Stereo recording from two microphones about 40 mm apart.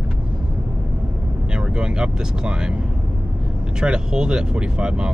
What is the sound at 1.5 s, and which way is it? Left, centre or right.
Speech, right.